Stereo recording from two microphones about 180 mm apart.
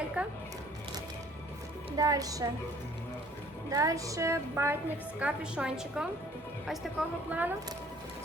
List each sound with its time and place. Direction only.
0.2 s a sound: 5° right (ahead or behind)
2.0 s a woman's voice: 20° right (ahead or behind)
3.7 s a woman's voice: 20° right (ahead or behind)